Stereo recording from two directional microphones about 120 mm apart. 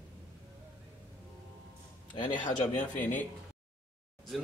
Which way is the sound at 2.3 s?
90° left.